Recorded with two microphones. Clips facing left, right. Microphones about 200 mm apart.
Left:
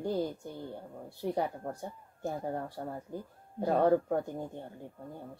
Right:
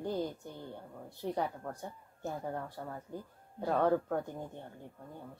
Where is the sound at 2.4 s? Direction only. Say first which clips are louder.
Left 3 dB; 35° left (ahead or behind).